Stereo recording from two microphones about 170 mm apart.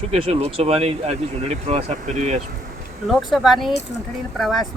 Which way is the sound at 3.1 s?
Centre (ahead or behind).